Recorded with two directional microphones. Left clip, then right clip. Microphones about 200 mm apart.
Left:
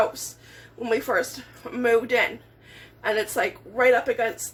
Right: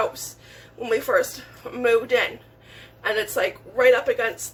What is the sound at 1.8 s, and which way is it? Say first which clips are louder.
A woman's voice: right 1 dB; 20° left (ahead or behind).